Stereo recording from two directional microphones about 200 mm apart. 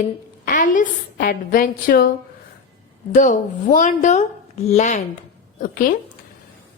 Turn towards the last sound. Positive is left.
turn(degrees=45)  # may be behind; listen again after turning